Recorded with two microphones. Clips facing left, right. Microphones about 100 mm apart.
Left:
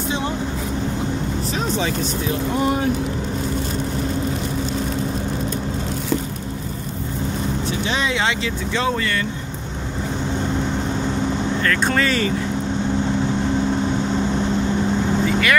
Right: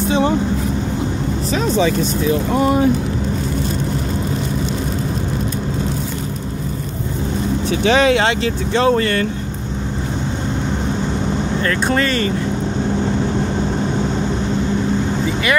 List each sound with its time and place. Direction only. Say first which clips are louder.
7.7 s speech: right 11 dB; 85° right; by 9.2 s 45° right (ahead or behind)
12.0 s speech: right 2 dB; 5° left (ahead or behind)